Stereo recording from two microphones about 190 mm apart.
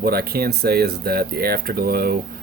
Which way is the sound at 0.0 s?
55° right (ahead or behind).